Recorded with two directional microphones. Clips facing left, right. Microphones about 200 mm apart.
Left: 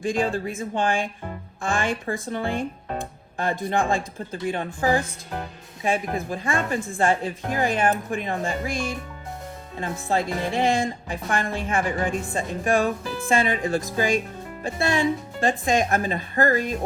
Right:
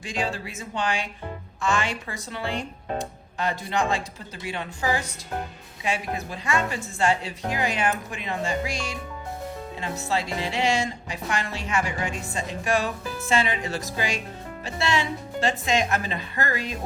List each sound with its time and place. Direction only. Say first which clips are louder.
0.0 s a woman's voice: left 6 dB; 55° left (ahead or behind)